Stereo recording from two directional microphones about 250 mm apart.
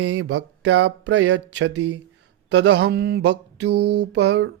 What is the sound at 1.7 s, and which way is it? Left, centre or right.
Mantra, right.